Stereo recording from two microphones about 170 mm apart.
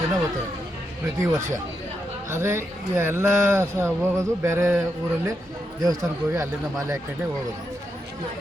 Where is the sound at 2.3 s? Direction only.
15° right (ahead or behind).